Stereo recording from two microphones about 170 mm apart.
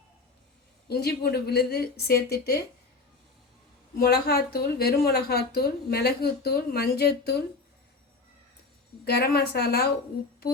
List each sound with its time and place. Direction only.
0.9 s a woman's voice: 70° left (ahead or behind)
3.9 s a woman's voice: 65° left (ahead or behind)
9.0 s a woman's voice: 65° left (ahead or behind)